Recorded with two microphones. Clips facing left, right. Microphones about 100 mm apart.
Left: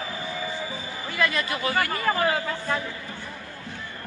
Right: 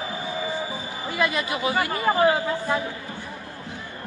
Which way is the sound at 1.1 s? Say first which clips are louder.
Right 1 dB; 20° right (ahead or behind).